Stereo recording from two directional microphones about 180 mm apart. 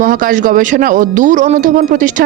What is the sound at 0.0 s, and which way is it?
Speech, 50° right (ahead or behind).